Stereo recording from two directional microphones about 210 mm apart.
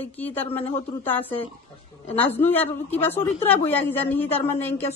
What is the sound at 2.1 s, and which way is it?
Speech, 10° left (ahead or behind).